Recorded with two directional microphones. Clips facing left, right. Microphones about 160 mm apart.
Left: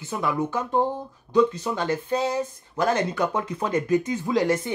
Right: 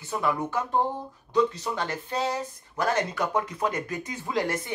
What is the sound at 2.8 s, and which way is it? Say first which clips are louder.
Speech: left 3 dB; 20° left (ahead or behind).